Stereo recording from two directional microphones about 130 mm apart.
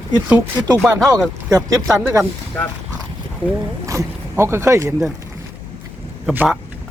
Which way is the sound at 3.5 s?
20° right (ahead or behind).